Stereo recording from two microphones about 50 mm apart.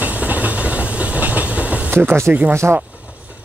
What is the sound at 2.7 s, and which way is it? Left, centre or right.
Speech, right.